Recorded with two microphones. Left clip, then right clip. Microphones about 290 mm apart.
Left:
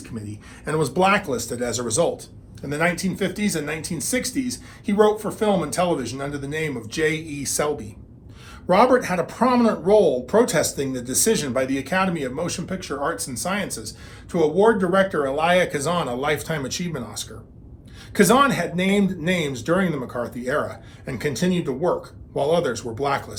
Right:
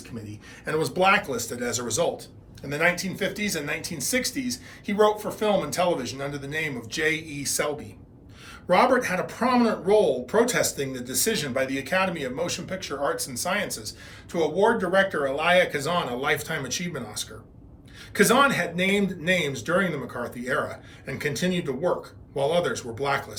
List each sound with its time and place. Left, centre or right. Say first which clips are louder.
0.3 s speech: left 2 dB; left